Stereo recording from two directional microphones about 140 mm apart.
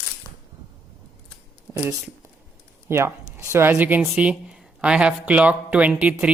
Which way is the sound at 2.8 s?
20° right (ahead or behind).